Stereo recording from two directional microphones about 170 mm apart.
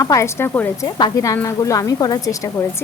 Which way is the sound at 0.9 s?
25° left (ahead or behind).